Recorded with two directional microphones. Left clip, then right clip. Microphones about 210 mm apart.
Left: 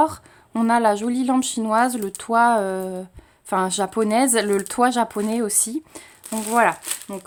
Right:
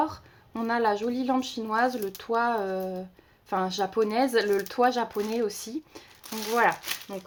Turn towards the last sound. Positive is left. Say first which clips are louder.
# left 4 dB
turn(degrees=35)  # may be behind; listen again after turning